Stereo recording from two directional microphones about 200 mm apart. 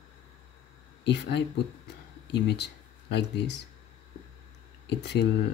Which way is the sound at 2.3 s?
55° left (ahead or behind).